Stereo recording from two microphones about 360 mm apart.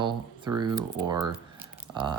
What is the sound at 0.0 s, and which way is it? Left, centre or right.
Speech, centre.